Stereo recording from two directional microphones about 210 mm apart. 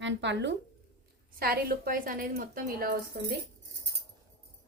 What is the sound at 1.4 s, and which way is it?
A woman's voice, 45° right (ahead or behind).